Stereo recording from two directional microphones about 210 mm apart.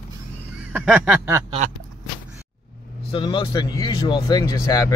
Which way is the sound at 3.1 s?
25° left (ahead or behind).